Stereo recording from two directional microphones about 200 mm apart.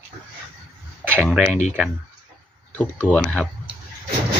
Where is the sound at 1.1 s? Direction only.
Centre (ahead or behind).